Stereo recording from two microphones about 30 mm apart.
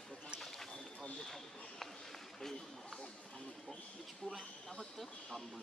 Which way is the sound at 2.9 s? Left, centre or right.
Left.